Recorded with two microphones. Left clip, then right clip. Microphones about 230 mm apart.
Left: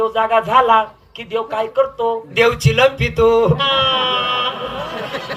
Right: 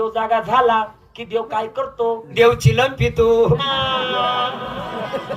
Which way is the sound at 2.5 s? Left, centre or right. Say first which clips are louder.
Left 2 dB; right.